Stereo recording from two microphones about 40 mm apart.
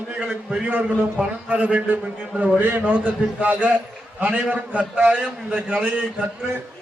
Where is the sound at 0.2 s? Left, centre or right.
Right.